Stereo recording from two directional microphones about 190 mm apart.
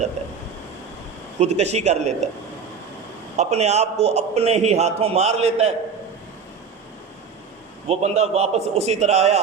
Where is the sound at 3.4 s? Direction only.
35° right (ahead or behind).